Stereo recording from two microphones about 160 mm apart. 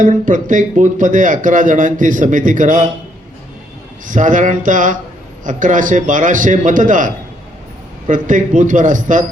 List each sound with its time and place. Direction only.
0.0 s a man's voice: 55° right (ahead or behind)
4.0 s a man's voice: 55° right (ahead or behind)